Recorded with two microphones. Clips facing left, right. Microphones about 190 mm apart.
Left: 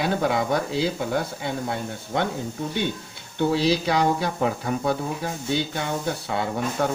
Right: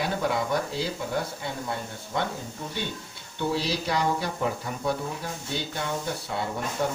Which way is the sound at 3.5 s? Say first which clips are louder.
Left 6 dB; 75° left (ahead or behind).